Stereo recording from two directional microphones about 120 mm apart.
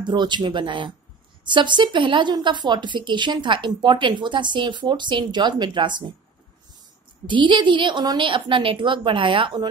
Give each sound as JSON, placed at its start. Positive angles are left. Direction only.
{"t": 0.0, "sound": "speech", "side_deg": -40}
{"t": 7.2, "sound": "a woman's voice", "side_deg": -40}